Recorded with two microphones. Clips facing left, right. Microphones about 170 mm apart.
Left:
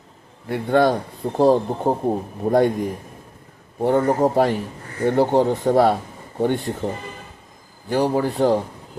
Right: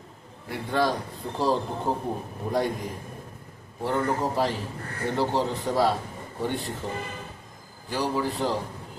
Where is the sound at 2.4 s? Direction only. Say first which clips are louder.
Left 9 dB; 40° left (ahead or behind).